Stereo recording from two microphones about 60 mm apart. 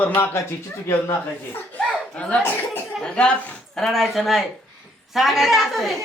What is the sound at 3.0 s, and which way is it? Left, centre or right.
Speech, centre.